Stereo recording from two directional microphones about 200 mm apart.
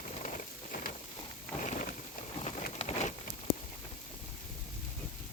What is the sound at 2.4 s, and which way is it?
Rain, 35° left (ahead or behind).